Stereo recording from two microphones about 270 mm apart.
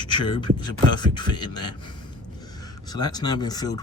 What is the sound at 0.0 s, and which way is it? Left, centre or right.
Beatboxing, centre.